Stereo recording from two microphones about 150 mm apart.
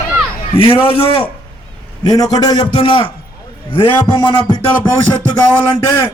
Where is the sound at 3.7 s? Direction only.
35° left (ahead or behind).